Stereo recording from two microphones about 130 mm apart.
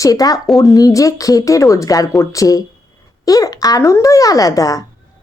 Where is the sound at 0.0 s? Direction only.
25° left (ahead or behind).